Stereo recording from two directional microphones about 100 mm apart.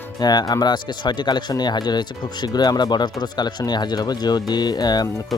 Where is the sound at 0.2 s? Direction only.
40° left (ahead or behind).